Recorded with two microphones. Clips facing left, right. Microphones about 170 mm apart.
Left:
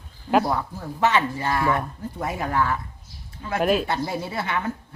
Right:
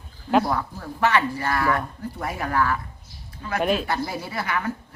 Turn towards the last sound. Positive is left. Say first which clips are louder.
# left 1 dB
turn(degrees=25)  # may be behind; listen again after turning